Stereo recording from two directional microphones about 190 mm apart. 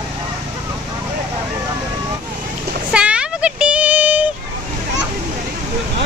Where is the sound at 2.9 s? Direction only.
5° right (ahead or behind).